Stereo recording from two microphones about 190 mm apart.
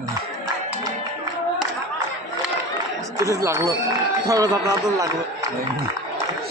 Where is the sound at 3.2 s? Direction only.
15° right (ahead or behind).